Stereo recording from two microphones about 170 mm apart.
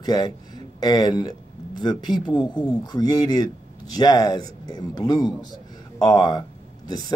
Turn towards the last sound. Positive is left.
turn(degrees=25)  # may be behind; listen again after turning